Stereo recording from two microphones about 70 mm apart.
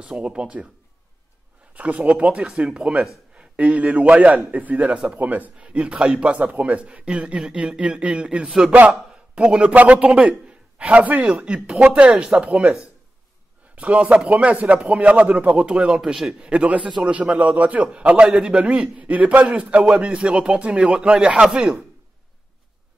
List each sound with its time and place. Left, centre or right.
0.0 s a man's voice: centre
1.7 s a man's voice: right